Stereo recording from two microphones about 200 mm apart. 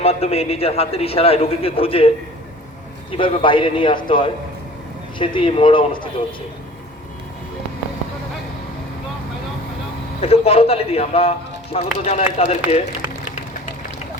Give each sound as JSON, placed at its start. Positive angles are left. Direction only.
{"t": 0.0, "sound": "a man's voice", "side_deg": 30}
{"t": 3.1, "sound": "a man's voice", "side_deg": 25}
{"t": 10.2, "sound": "speech", "side_deg": 30}